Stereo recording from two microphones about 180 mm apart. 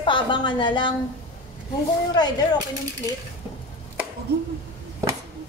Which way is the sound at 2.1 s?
25° left (ahead or behind).